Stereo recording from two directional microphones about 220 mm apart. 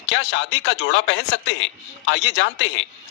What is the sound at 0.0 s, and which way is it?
A man's voice, 60° left (ahead or behind).